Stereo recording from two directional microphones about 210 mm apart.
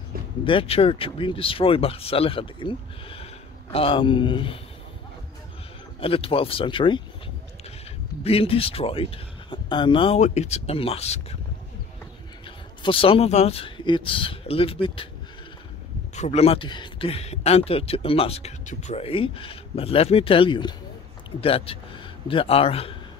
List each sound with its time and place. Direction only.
0.5 s speech: 25° left (ahead or behind)
5.9 s speech: 25° left (ahead or behind)
8.2 s speech: 30° left (ahead or behind)
12.4 s speech: 25° left (ahead or behind)
16.2 s speech: 30° left (ahead or behind)